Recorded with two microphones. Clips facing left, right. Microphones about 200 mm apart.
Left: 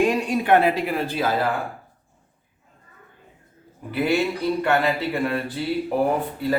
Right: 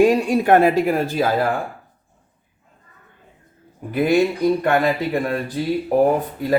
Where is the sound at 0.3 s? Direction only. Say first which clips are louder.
Right 4 dB; 45° right (ahead or behind).